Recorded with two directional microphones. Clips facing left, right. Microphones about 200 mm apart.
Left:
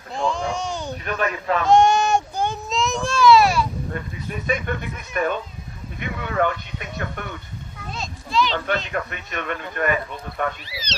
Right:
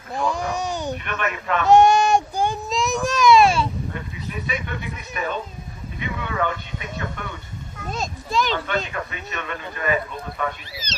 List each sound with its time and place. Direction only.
0.1 s a sound: 15° right (ahead or behind)
1.0 s speech: 35° left (ahead or behind)
1.8 s child singing: 15° right (ahead or behind)
2.8 s baby cry: 15° right (ahead or behind)
4.4 s speech: 45° left (ahead or behind)
6.0 s vehicle: 50° left (ahead or behind)
7.9 s a sound: 45° right (ahead or behind)
8.9 s speech: 55° left (ahead or behind)